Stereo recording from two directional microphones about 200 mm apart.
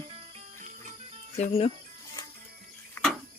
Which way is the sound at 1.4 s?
30° left (ahead or behind).